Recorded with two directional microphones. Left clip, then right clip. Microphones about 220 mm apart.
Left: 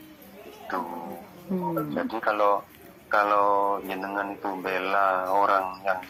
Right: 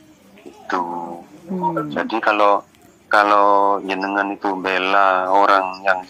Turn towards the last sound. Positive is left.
turn(degrees=-20)  # may be behind; listen again after turning